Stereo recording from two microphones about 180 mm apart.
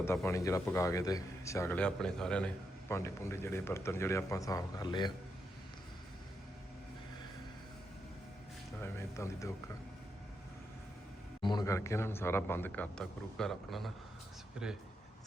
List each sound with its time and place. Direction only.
0.3 s a man's voice: 15° left (ahead or behind)
2.9 s a man's voice: 15° left (ahead or behind)
8.8 s speech: 15° left (ahead or behind)
11.4 s a man's voice: 20° left (ahead or behind); by 14.8 s 5° right (ahead or behind)